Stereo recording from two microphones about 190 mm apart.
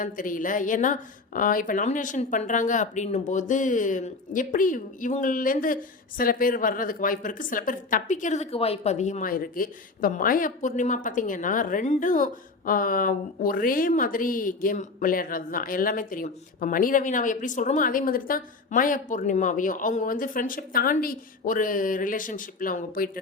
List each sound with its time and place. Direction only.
0.0 s speech: 45° left (ahead or behind)